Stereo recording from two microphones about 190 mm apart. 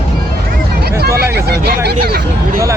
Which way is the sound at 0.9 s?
55° right (ahead or behind).